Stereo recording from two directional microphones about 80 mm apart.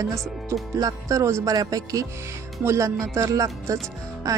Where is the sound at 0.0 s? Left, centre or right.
Right.